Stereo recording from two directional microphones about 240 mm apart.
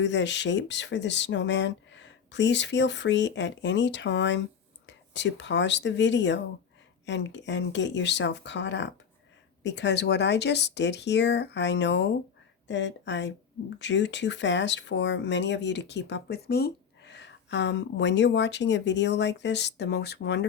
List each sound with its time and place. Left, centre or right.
0.0 s speech: left